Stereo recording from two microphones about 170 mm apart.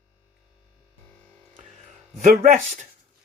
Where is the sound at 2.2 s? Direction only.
55° right (ahead or behind).